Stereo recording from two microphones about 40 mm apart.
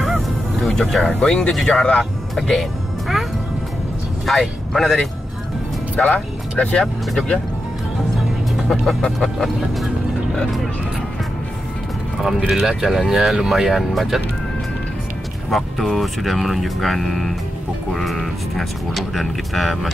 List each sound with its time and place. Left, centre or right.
0.0 s music: centre
1.0 s speech: centre
1.8 s speech: left
2.3 s speech: centre
4.3 s speech: centre
6.0 s speech: left
8.6 s speech: centre
12.4 s speech: centre
13.7 s speech: centre
15.5 s speech: centre